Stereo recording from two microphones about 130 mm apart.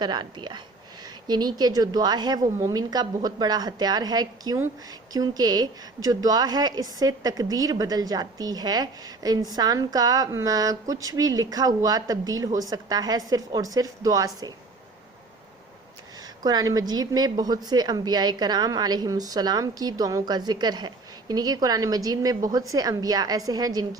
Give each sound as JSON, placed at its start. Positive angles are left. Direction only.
{"t": 0.0, "sound": "a woman's voice", "side_deg": -35}
{"t": 16.2, "sound": "a woman's voice", "side_deg": -30}